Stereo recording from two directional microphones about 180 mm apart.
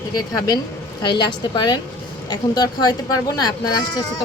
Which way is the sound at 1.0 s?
25° left (ahead or behind).